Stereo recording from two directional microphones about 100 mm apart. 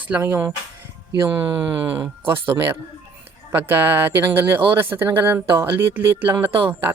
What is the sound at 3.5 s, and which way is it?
Speech, 20° right (ahead or behind).